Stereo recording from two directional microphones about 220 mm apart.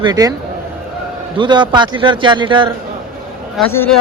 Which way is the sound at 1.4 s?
20° right (ahead or behind).